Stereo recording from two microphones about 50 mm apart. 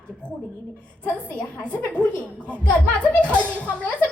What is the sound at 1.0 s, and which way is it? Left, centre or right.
Speech, left.